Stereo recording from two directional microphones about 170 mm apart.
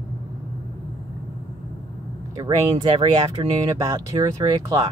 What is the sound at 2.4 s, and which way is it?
Speech, 30° right (ahead or behind).